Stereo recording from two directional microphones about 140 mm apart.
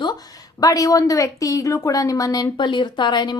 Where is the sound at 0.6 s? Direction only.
25° left (ahead or behind).